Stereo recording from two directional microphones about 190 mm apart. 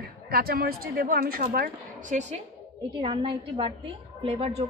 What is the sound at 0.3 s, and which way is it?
A woman's voice, 55° right (ahead or behind).